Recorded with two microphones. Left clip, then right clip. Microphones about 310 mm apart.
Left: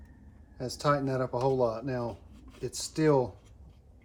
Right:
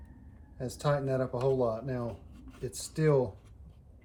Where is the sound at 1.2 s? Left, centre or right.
Centre.